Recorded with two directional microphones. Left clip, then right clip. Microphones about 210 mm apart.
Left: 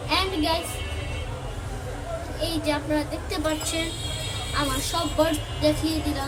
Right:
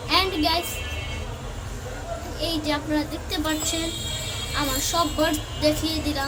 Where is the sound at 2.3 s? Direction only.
15° right (ahead or behind).